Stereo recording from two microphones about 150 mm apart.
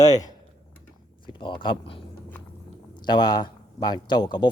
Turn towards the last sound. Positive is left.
turn(degrees=30)  # may be behind; listen again after turning